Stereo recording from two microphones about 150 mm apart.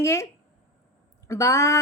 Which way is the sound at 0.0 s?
20° left (ahead or behind).